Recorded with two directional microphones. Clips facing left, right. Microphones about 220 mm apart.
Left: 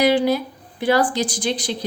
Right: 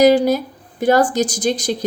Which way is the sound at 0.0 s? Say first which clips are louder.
Right 5 dB; 40° right (ahead or behind).